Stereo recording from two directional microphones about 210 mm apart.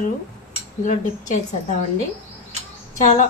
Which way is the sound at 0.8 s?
35° left (ahead or behind).